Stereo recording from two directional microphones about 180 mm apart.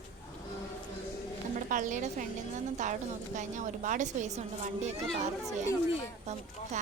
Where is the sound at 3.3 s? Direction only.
45° right (ahead or behind).